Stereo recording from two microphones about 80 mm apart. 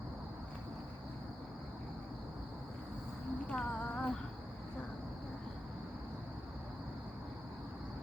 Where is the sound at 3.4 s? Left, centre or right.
Centre.